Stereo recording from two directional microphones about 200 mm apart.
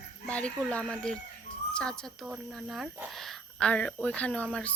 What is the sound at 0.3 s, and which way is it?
Jingle bell, 5° left (ahead or behind).